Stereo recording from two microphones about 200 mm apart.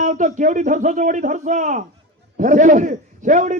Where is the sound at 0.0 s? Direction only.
40° right (ahead or behind).